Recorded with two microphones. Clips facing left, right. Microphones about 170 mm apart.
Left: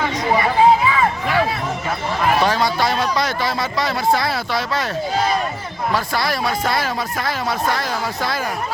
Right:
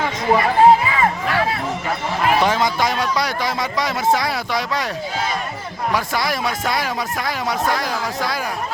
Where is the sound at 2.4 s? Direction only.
20° right (ahead or behind).